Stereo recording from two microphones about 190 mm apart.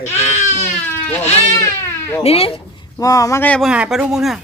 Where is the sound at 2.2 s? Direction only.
30° left (ahead or behind); by 3.7 s 10° left (ahead or behind).